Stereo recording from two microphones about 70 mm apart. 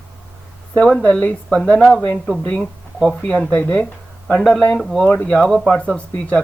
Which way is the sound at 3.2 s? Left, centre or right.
Centre.